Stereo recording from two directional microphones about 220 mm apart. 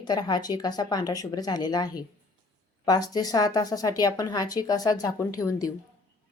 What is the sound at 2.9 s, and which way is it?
Speech, 15° left (ahead or behind).